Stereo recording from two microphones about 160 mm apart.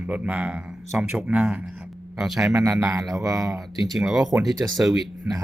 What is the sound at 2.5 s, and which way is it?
Speech, 20° right (ahead or behind).